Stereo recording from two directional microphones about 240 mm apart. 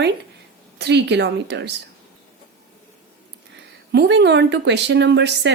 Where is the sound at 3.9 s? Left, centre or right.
Right.